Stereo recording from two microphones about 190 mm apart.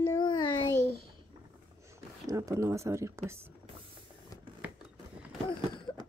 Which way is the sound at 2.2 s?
20° right (ahead or behind).